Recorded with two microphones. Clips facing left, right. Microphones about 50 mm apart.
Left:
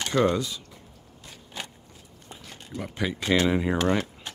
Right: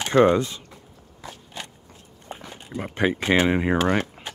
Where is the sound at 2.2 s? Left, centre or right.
Right.